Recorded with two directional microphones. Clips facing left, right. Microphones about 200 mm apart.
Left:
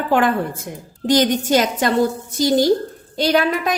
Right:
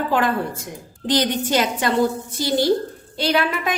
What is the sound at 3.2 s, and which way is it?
Speech, 40° left (ahead or behind).